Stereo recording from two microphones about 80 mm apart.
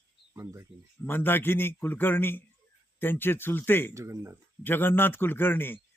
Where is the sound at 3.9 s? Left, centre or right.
Right.